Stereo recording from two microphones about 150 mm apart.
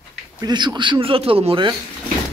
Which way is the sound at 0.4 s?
30° right (ahead or behind).